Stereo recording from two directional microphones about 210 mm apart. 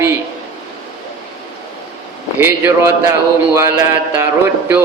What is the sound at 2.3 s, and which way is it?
A man's voice, 10° right (ahead or behind).